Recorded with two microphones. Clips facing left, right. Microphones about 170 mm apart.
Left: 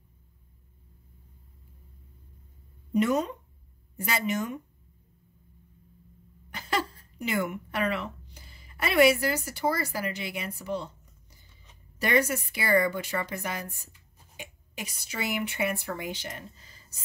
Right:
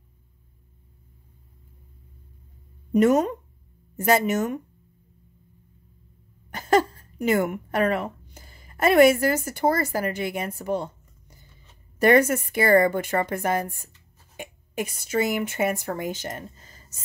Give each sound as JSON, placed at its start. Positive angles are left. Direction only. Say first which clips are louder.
{"t": 2.9, "sound": "a woman's voice", "louder": "right 7 dB", "side_deg": -50}
{"t": 6.5, "sound": "a woman's voice", "louder": "right 10 dB", "side_deg": -45}